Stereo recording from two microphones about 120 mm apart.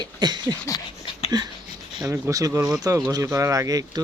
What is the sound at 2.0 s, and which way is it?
Speech, 20° right (ahead or behind).